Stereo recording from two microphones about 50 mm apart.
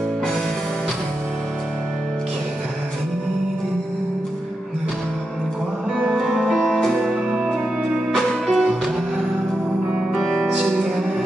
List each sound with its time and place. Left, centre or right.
6.0 s music: centre
8.1 s music: centre
10.2 s music: centre